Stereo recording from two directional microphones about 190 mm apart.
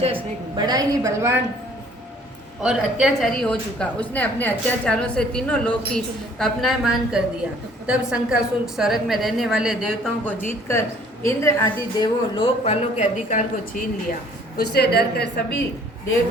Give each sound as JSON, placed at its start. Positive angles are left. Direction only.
{"t": 0.0, "sound": "a woman's voice", "side_deg": -25}
{"t": 2.6, "sound": "a woman's voice", "side_deg": 0}
{"t": 10.7, "sound": "a woman's voice", "side_deg": 15}